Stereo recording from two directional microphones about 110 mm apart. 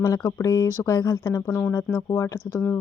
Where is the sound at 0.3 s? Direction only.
30° left (ahead or behind).